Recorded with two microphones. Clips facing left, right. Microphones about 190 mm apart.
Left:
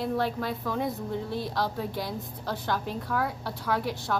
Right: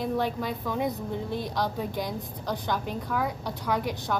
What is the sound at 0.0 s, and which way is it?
A woman's voice, centre (ahead or behind).